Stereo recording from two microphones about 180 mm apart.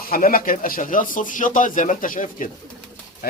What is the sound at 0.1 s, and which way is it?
Speech, 50° left (ahead or behind).